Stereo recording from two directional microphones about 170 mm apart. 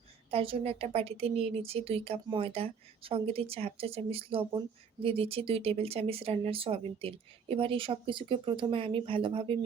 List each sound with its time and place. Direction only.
0.3 s speech: 35° right (ahead or behind)